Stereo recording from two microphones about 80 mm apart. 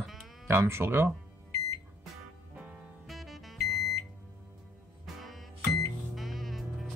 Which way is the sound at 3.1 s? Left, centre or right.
Centre.